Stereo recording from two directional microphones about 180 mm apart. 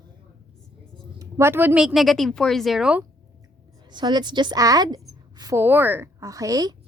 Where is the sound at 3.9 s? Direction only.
25° right (ahead or behind).